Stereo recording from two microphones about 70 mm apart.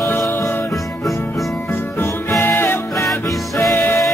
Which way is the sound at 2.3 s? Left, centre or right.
Left.